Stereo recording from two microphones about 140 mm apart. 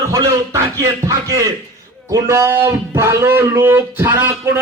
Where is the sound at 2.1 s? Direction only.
20° right (ahead or behind).